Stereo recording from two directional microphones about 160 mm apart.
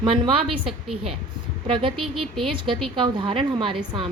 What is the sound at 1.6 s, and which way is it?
A woman's voice, 35° right (ahead or behind).